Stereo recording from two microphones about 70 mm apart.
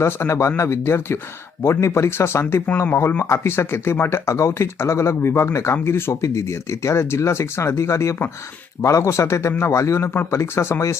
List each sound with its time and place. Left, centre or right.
0.0 s speech: left